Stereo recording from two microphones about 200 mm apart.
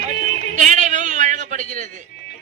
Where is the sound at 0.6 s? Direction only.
40° right (ahead or behind).